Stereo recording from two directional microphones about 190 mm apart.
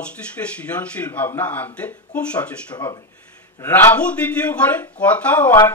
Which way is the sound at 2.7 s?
20° left (ahead or behind).